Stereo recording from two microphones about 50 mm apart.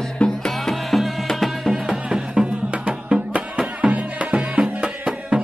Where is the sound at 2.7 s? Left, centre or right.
Right.